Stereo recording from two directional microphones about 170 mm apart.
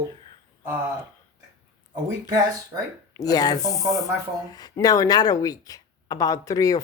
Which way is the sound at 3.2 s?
20° left (ahead or behind).